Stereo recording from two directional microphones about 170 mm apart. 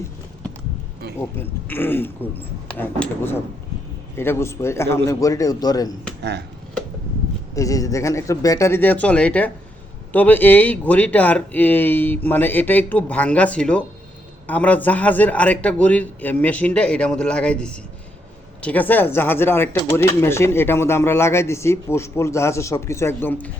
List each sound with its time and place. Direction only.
1.2 s a man's voice: 10° left (ahead or behind)
7.5 s speech: 20° left (ahead or behind)